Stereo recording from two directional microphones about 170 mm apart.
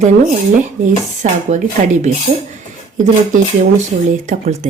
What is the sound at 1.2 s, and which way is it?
Speech, 45° right (ahead or behind).